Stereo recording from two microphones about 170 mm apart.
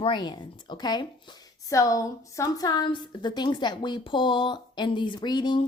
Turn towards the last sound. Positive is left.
turn(degrees=25)  # may be behind; listen again after turning